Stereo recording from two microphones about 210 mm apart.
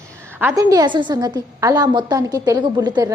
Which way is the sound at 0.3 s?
15° right (ahead or behind).